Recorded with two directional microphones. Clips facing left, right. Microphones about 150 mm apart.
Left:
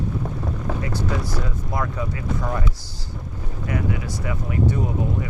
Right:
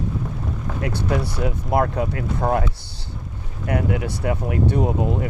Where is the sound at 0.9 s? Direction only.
65° right (ahead or behind).